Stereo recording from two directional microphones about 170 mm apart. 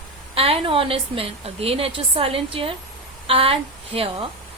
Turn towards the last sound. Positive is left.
turn(degrees=-35)  # may be behind; listen again after turning